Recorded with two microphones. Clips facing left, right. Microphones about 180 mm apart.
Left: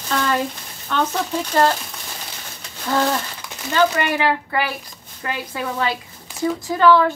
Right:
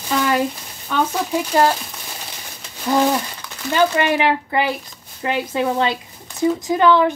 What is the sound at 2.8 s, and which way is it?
Speech, 15° right (ahead or behind).